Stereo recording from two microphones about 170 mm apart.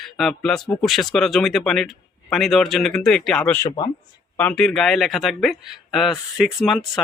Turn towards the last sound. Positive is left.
turn(degrees=0)  # may be behind; listen again after turning